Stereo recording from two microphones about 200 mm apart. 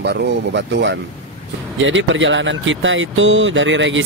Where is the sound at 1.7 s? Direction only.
70° right (ahead or behind).